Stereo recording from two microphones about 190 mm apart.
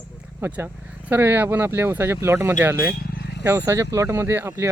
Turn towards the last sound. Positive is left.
turn(degrees=-15)  # may be behind; listen again after turning